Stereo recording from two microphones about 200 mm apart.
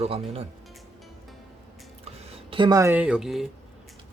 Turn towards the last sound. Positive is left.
turn(degrees=0)  # may be behind; listen again after turning